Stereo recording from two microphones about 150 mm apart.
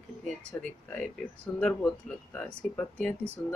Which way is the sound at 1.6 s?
5° left (ahead or behind).